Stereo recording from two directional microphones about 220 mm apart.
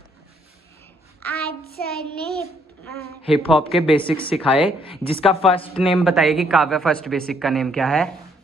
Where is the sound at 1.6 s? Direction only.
45° left (ahead or behind).